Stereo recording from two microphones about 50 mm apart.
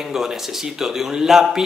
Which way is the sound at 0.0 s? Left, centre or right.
Centre.